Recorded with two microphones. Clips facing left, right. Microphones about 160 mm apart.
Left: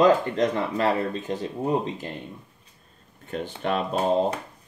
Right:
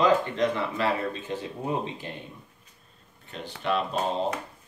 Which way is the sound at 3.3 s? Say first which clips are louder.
Left 2 dB; 45° left (ahead or behind).